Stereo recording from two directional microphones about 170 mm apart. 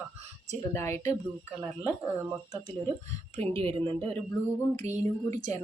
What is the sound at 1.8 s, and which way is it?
Speech, 15° right (ahead or behind).